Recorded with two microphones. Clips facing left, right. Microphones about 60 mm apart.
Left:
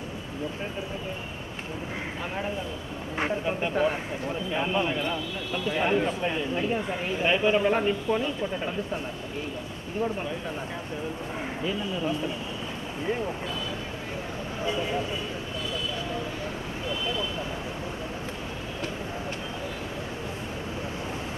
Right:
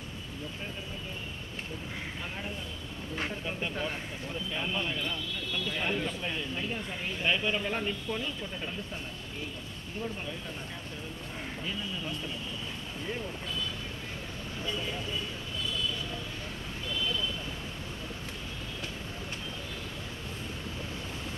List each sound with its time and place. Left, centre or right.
3.2 s speech: left
11.6 s speech: left
14.6 s speech: left
16.9 s vehicle: left